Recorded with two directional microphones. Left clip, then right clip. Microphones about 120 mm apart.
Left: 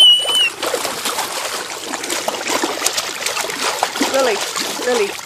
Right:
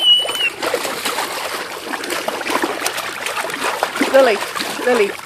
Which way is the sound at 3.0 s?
30° left (ahead or behind).